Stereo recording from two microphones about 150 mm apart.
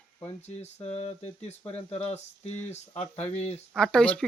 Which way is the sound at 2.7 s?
40° left (ahead or behind).